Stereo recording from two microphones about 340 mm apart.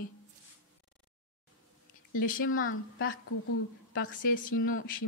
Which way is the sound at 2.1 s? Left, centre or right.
Left.